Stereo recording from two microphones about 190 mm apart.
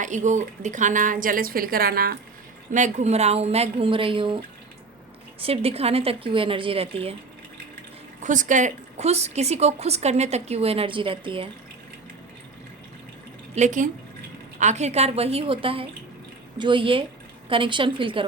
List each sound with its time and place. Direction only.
0.0 s speech: 40° right (ahead or behind)
2.7 s a woman's voice: 40° right (ahead or behind)
5.4 s a woman's voice: 30° right (ahead or behind)
8.2 s a woman's voice: 40° right (ahead or behind)
13.6 s a woman's voice: 40° right (ahead or behind); by 18.3 s 25° right (ahead or behind)